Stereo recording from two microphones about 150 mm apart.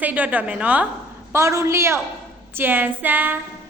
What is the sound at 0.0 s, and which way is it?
A woman's voice, 10° right (ahead or behind).